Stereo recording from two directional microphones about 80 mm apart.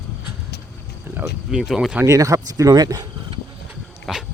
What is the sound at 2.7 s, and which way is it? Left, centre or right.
Speech, right.